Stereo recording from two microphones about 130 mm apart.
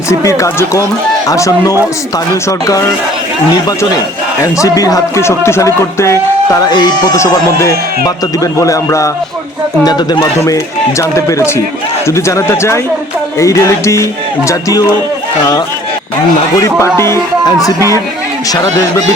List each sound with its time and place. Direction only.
0.1 s speech: 25° left (ahead or behind)
4.5 s speech: 25° left (ahead or behind)
16.6 s speech: 25° left (ahead or behind)